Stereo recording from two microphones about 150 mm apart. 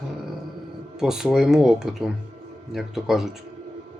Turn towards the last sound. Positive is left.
turn(degrees=0)  # may be behind; listen again after turning